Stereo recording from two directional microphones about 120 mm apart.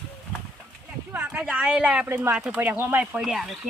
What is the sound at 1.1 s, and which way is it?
Speech, 15° right (ahead or behind).